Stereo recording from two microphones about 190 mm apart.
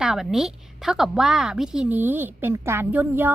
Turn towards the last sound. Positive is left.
turn(degrees=-10)  # may be behind; listen again after turning